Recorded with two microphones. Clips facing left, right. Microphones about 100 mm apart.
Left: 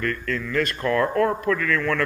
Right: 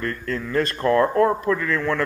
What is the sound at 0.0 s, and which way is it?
A man's voice, 30° right (ahead or behind).